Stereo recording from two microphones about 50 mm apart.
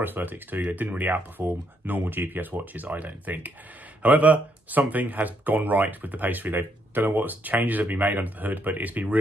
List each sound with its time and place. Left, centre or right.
0.0 s speech: right